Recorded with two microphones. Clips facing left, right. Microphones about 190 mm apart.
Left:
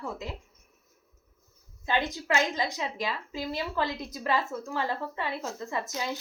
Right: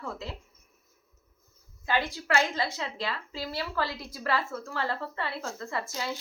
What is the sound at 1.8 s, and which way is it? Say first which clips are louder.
A woman's voice: left 1 dB; 20° left (ahead or behind).